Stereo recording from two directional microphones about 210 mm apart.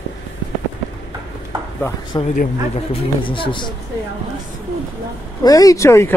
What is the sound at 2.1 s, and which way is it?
Speech, 20° left (ahead or behind).